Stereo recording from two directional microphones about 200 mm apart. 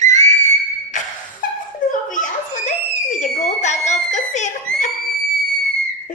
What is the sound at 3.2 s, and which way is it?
Screaming, 35° left (ahead or behind).